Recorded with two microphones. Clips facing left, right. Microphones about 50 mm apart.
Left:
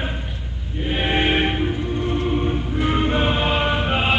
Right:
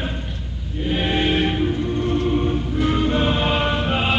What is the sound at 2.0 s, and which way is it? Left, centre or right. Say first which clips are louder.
Music: right 1 dB; centre.